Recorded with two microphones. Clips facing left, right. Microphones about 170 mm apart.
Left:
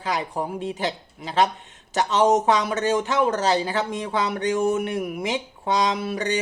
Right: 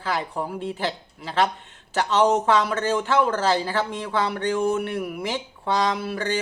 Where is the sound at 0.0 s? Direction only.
20° left (ahead or behind).